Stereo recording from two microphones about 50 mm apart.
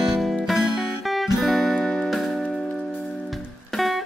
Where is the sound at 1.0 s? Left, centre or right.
Centre.